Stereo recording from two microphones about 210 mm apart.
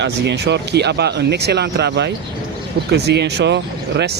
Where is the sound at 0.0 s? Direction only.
55° right (ahead or behind).